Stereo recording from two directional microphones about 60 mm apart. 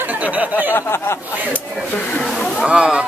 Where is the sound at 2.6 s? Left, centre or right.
Centre.